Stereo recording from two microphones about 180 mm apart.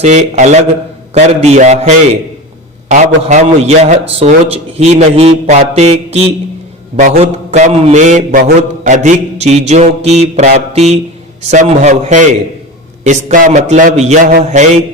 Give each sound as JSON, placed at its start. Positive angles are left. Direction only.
{"t": 0.0, "sound": "mantra", "side_deg": -40}